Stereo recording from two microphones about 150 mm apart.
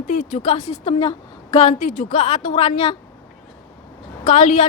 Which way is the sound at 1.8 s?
65° left (ahead or behind).